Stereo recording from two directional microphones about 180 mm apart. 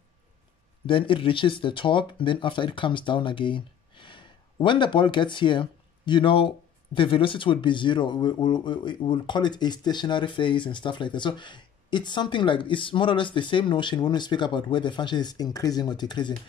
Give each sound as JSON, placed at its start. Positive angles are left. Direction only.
{"t": 0.8, "sound": "speech", "side_deg": 30}